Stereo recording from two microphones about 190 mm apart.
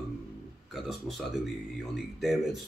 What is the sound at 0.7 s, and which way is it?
Speech, centre (ahead or behind).